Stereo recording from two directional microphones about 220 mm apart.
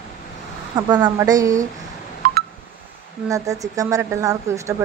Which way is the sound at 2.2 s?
40° right (ahead or behind).